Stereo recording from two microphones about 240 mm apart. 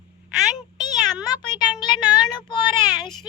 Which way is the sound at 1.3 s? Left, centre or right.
Centre.